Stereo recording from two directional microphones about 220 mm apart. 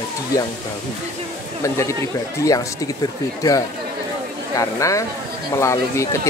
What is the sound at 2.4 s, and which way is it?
Speech, 15° left (ahead or behind).